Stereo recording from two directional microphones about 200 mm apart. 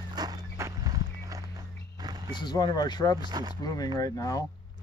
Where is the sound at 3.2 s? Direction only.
20° right (ahead or behind).